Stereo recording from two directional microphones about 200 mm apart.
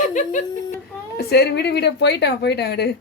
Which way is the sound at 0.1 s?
40° left (ahead or behind).